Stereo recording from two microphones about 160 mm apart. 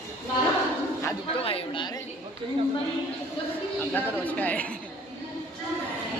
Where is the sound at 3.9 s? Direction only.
10° left (ahead or behind).